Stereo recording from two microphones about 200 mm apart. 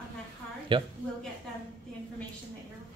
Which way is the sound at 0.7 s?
25° right (ahead or behind).